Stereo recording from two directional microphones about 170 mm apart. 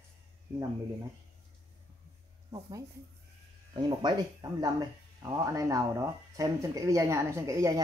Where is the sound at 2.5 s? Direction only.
20° right (ahead or behind).